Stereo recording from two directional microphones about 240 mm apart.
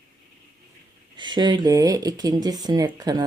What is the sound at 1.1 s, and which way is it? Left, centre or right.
Speech, centre.